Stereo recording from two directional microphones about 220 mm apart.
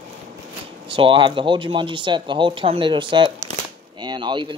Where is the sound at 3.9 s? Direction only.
20° right (ahead or behind).